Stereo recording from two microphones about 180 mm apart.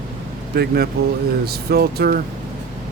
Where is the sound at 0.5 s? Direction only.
60° right (ahead or behind).